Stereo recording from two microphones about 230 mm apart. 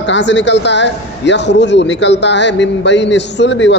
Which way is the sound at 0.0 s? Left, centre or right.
Left.